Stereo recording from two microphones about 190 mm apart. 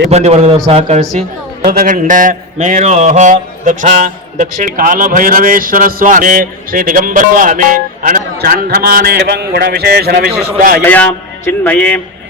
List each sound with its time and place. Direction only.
0.1 s a man's voice: 35° right (ahead or behind)
1.6 s a man's voice: 50° right (ahead or behind)
10.8 s a man's voice: 10° left (ahead or behind)